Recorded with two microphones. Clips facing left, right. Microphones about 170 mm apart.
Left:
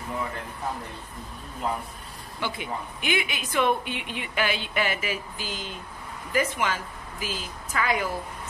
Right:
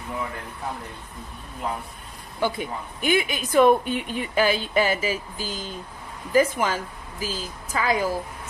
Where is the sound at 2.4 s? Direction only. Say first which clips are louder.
Right 5 dB; 40° right (ahead or behind).